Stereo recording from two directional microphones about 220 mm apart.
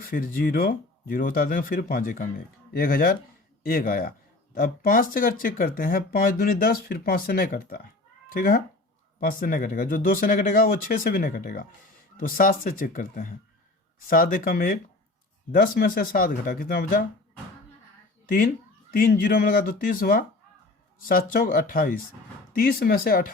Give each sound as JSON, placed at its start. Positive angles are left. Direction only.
{"t": 0.0, "sound": "speech", "side_deg": 40}
{"t": 18.9, "sound": "speech", "side_deg": 40}